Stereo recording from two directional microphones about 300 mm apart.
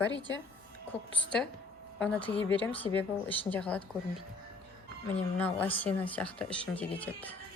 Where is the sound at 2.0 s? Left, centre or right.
Centre.